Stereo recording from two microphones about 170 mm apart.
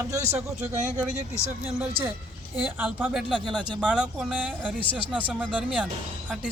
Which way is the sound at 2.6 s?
10° right (ahead or behind).